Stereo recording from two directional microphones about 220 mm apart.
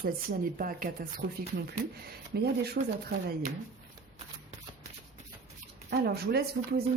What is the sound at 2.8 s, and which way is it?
Speech, 50° right (ahead or behind).